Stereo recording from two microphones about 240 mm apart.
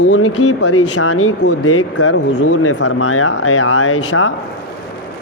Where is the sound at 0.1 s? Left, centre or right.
Left.